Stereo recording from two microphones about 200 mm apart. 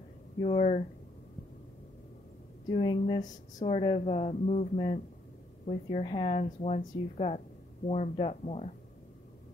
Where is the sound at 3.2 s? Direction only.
35° left (ahead or behind).